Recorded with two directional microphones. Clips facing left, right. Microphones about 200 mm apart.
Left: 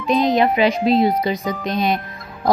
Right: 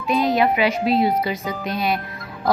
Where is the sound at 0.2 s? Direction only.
15° left (ahead or behind).